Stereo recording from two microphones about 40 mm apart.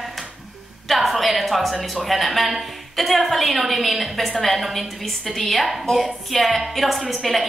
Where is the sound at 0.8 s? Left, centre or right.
Centre.